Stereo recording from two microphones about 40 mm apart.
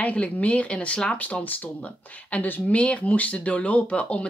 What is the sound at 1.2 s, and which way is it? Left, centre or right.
Speech, left.